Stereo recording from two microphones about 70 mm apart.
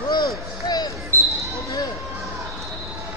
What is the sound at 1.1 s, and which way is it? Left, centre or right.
Basketball bounce, right.